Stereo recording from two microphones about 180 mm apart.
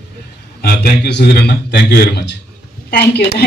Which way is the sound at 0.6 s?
65° left (ahead or behind).